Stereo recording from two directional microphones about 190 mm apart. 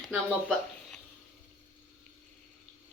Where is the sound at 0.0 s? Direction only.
5° right (ahead or behind).